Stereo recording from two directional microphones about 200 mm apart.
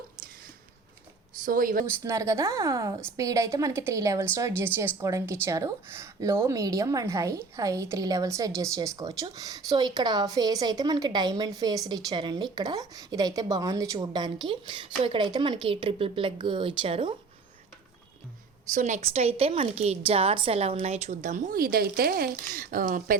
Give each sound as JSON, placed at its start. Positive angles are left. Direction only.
{"t": 1.5, "sound": "speech", "side_deg": -45}
{"t": 1.8, "sound": "a woman's voice", "side_deg": -15}
{"t": 18.7, "sound": "a woman's voice", "side_deg": -35}